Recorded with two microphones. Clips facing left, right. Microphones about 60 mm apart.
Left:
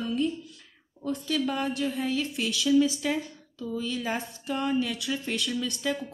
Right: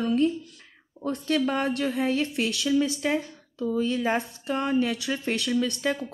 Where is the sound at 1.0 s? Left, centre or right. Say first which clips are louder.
Right 3 dB; right.